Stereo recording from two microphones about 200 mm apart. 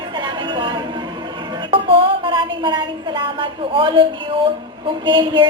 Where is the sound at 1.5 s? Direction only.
25° right (ahead or behind).